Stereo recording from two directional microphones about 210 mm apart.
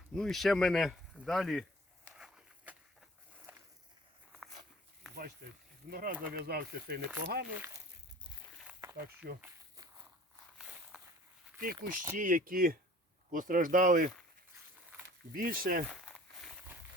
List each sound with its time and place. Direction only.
0.1 s speech: centre (ahead or behind)
2.0 s walk: 5° right (ahead or behind)
5.9 s speech: 45° right (ahead or behind)
8.6 s walk: 15° right (ahead or behind)
9.4 s a sound: 15° right (ahead or behind)
10.6 s walk: 5° right (ahead or behind)
11.6 s speech: 40° right (ahead or behind)
15.4 s speech: 40° right (ahead or behind)
15.9 s a sound: centre (ahead or behind)